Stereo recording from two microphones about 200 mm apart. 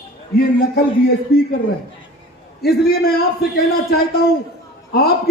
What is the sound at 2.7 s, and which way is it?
Speech, 50° left (ahead or behind).